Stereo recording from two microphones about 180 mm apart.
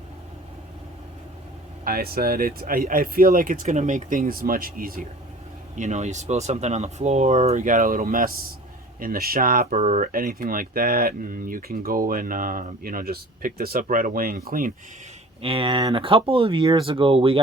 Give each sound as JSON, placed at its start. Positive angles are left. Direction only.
{"t": 1.8, "sound": "speech", "side_deg": -55}
{"t": 5.7, "sound": "speech", "side_deg": -40}
{"t": 15.4, "sound": "speech", "side_deg": -30}